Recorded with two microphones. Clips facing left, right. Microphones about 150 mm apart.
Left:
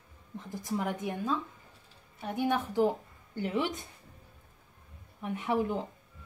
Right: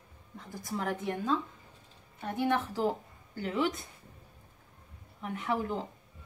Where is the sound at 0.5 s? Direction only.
20° left (ahead or behind).